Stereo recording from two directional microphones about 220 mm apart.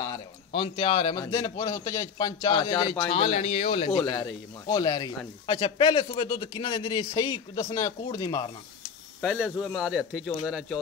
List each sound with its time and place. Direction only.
0.0 s a man's voice: 20° left (ahead or behind)
9.2 s speech: 5° right (ahead or behind)